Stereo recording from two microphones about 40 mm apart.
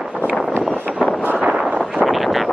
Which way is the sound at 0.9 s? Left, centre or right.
Centre.